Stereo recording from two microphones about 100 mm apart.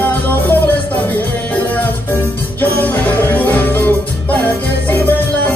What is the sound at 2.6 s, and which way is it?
Music, 15° left (ahead or behind).